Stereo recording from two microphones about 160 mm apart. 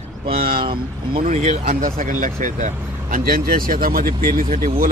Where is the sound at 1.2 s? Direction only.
40° right (ahead or behind).